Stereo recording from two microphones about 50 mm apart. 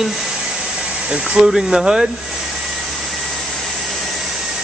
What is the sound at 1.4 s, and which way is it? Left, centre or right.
Speech, centre.